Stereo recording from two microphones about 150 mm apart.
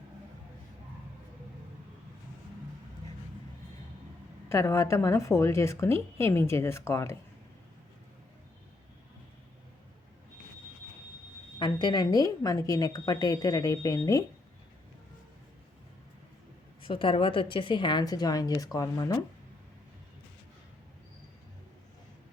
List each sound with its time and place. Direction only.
4.4 s a woman's voice: 20° left (ahead or behind)
11.6 s a woman's voice: 30° left (ahead or behind)
16.8 s a woman's voice: 35° left (ahead or behind)